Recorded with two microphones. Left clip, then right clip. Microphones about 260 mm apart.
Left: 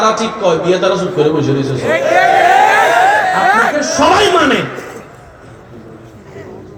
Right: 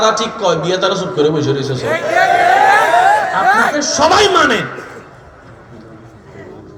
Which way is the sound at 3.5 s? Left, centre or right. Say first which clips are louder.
Left 1 dB; centre.